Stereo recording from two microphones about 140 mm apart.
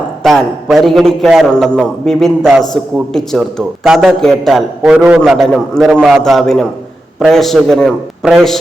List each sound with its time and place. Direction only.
0.2 s a man's voice: centre (ahead or behind)